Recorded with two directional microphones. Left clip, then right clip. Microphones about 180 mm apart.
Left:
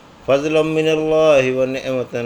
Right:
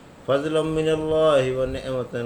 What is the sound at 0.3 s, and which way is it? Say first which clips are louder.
A man's voice: left 6 dB; 20° left (ahead or behind).